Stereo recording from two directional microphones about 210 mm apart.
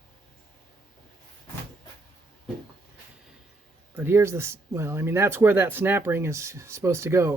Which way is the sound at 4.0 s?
10° right (ahead or behind).